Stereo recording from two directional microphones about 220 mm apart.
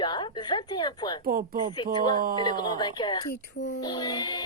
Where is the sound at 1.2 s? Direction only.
40° right (ahead or behind).